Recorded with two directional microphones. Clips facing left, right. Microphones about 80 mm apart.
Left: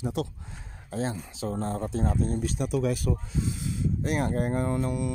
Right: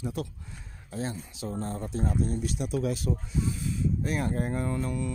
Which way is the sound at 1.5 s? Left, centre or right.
Left.